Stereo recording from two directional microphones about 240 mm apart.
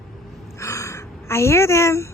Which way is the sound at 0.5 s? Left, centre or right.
Centre.